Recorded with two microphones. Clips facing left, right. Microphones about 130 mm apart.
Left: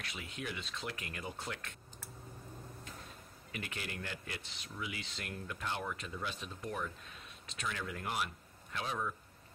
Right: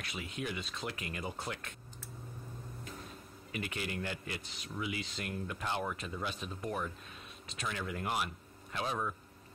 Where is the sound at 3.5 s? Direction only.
15° right (ahead or behind).